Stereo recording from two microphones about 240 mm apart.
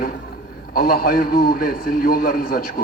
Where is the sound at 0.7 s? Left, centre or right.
Left.